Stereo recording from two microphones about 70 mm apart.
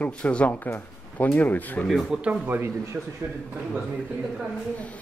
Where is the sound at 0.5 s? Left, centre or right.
Left.